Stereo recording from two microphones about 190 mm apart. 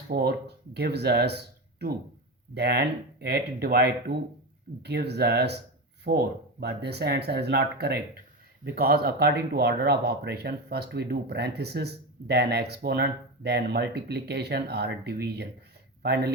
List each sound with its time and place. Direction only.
0.1 s speech: 55° right (ahead or behind)